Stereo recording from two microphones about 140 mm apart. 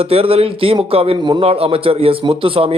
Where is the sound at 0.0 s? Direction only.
45° right (ahead or behind).